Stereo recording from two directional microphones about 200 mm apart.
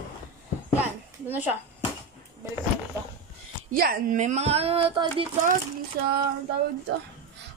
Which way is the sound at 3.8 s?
50° right (ahead or behind).